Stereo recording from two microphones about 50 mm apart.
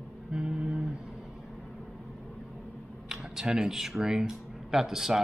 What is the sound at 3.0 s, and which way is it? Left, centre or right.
Speech, centre.